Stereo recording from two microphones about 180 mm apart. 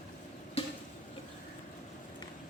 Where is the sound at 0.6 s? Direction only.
35° left (ahead or behind).